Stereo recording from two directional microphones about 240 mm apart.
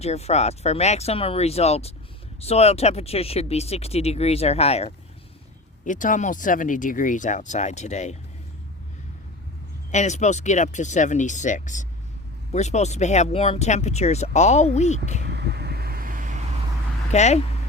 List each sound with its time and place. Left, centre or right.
0.0 s speech: left
9.9 s speech: left
15.3 s vehicle: right
17.1 s speech: left